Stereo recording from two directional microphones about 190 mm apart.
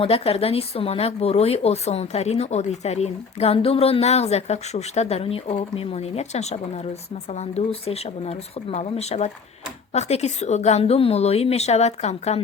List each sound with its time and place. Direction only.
0.0 s speech: 30° left (ahead or behind)